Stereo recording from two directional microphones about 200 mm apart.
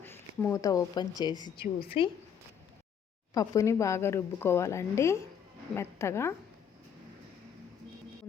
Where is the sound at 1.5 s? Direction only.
45° left (ahead or behind).